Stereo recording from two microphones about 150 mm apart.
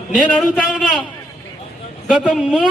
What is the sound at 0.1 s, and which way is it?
Speech, 5° right (ahead or behind).